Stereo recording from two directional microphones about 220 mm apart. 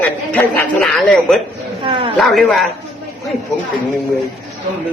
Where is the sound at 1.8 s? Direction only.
25° right (ahead or behind).